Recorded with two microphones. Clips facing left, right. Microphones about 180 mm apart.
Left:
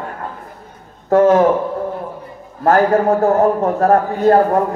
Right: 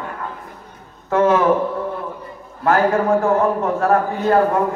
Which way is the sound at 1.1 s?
40° left (ahead or behind).